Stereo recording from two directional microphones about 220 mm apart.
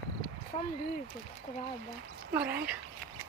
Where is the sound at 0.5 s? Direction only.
30° left (ahead or behind).